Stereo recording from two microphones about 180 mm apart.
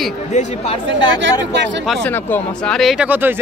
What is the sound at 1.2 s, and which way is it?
Speech, 80° right.